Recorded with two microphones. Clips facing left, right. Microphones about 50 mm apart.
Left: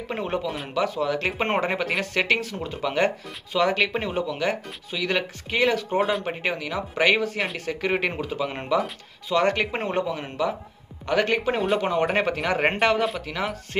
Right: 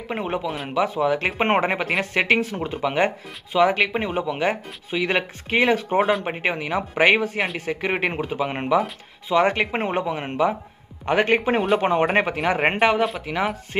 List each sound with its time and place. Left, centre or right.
0.1 s speech: centre